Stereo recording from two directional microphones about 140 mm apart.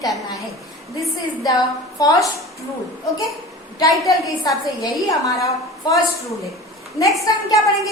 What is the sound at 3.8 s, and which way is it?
A woman's voice, 25° left (ahead or behind).